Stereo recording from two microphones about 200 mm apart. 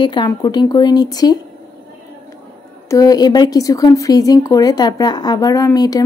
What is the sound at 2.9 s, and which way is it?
A woman's voice, 20° left (ahead or behind).